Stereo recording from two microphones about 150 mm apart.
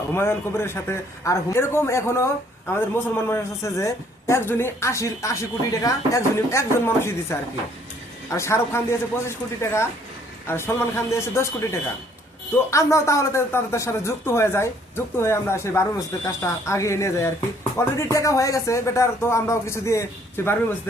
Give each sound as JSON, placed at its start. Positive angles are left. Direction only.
{"t": 0.1, "sound": "a woman's voice", "side_deg": 15}